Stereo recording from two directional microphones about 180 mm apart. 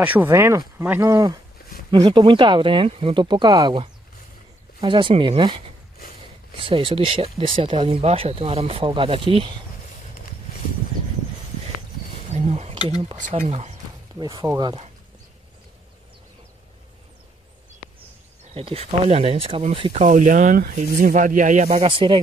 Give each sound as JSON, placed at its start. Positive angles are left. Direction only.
{"t": 0.0, "sound": "speech", "side_deg": -10}
{"t": 12.3, "sound": "a sound", "side_deg": -35}
{"t": 13.5, "sound": "speech", "side_deg": -35}
{"t": 14.1, "sound": "speech", "side_deg": -20}
{"t": 18.4, "sound": "speech", "side_deg": -30}
{"t": 21.8, "sound": "speech", "side_deg": -30}